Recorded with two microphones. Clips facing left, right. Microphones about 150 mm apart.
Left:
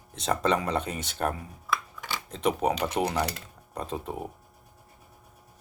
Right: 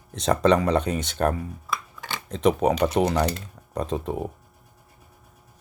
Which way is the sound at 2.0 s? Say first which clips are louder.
Right 6 dB; 70° right (ahead or behind).